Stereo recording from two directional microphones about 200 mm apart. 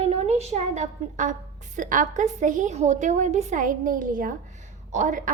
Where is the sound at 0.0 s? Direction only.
30° right (ahead or behind).